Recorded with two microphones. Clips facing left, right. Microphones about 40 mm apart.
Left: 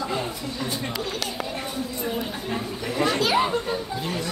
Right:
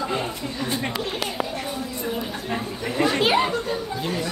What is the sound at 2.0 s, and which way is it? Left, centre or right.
Speech, centre.